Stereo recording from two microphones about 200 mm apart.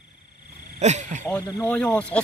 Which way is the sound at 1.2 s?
5° left (ahead or behind).